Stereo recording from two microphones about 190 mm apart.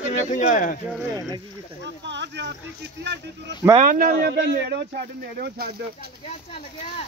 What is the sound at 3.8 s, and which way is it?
Speech, 45° right (ahead or behind).